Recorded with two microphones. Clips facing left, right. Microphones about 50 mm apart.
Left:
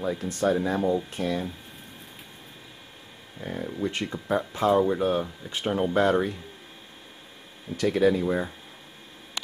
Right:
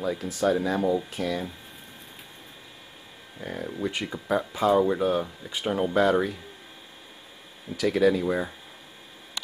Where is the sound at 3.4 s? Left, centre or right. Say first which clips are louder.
Left 1 dB; centre.